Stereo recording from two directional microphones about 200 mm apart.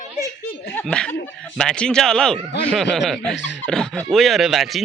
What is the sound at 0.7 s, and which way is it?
Speech, 5° left (ahead or behind).